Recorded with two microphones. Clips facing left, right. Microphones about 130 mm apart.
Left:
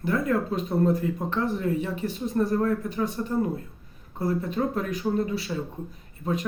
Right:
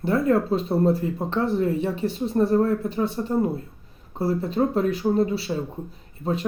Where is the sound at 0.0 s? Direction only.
30° right (ahead or behind).